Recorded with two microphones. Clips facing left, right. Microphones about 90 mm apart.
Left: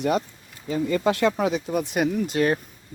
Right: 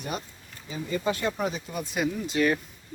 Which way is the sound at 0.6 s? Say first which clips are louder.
Left 7 dB; 65° left (ahead or behind).